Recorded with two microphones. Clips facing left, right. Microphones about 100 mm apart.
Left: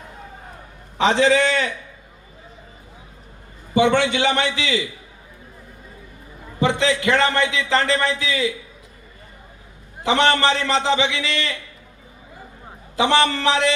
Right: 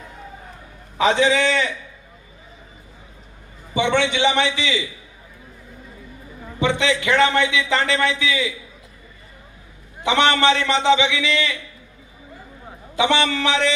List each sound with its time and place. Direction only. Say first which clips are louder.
0.9 s a man's voice: even; 30° left (ahead or behind)
3.8 s a man's voice: left 2 dB; 45° left (ahead or behind)
6.6 s a man's voice: left 1 dB; 35° left (ahead or behind)
10.0 s a man's voice: even; 35° left (ahead or behind)
13.0 s a man's voice: left 1 dB; 40° left (ahead or behind)